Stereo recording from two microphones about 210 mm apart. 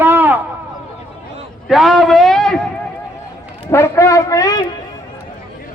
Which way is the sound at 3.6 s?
10° left (ahead or behind).